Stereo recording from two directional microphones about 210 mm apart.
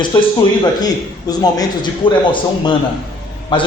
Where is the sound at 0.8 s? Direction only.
20° left (ahead or behind).